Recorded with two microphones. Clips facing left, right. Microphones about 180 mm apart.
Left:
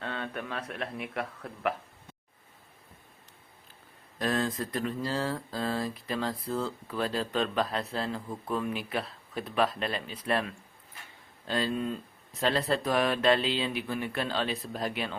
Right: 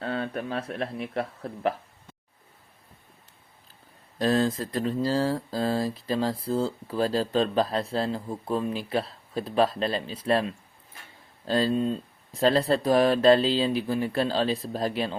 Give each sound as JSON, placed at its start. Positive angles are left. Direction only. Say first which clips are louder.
{"t": 0.0, "sound": "speech", "louder": "right 6 dB", "side_deg": -35}
{"t": 4.2, "sound": "speech", "louder": "right 6 dB", "side_deg": -30}